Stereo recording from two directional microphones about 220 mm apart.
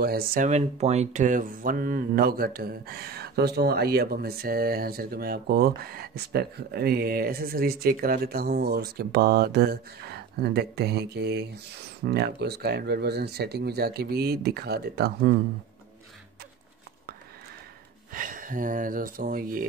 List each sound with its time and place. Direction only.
0.0 s speech: 45° right (ahead or behind)
18.1 s speech: 40° right (ahead or behind)